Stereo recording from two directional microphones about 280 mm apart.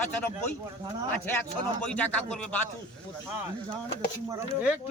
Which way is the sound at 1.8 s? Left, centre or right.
Centre.